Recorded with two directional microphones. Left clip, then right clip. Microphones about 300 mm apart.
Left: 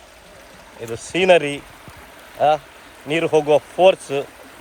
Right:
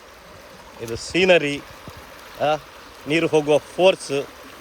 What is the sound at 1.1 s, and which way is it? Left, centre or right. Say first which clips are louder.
Speech: left 2 dB; centre.